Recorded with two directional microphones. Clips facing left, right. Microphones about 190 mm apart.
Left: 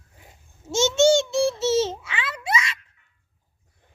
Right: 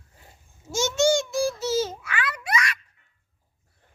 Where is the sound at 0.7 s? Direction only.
25° left (ahead or behind).